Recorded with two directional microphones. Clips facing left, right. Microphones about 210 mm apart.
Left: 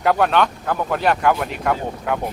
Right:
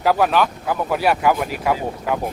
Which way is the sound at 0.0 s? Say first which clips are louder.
Even; 5° right (ahead or behind).